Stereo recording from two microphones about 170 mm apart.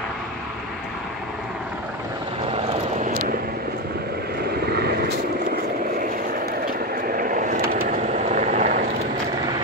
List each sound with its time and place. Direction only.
7.2 s vehicle: 55° right (ahead or behind)
8.3 s vehicle: 45° right (ahead or behind)